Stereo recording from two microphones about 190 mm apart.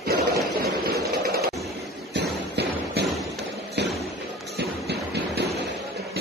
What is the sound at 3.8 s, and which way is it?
Thump, 65° right (ahead or behind).